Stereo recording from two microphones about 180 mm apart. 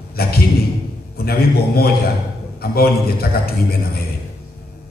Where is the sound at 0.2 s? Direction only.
60° left (ahead or behind).